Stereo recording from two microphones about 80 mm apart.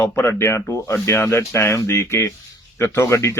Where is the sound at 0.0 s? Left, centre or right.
Left.